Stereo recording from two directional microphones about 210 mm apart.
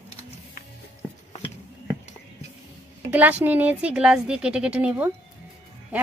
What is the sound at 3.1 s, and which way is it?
Speech, 5° right (ahead or behind).